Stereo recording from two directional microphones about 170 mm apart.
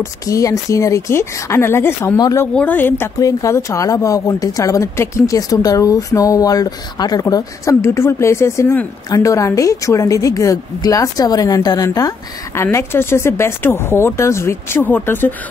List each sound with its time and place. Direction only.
0.0 s speech: 20° left (ahead or behind)